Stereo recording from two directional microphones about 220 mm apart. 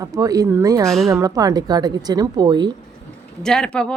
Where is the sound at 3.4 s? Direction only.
5° left (ahead or behind).